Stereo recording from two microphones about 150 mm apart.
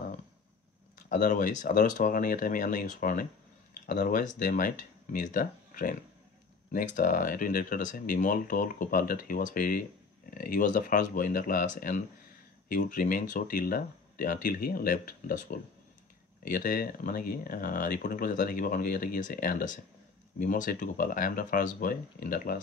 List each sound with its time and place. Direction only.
1.0 s speech: 60° left (ahead or behind)